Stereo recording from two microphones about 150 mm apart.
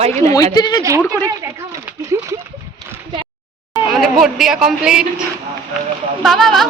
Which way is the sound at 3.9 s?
Centre (ahead or behind).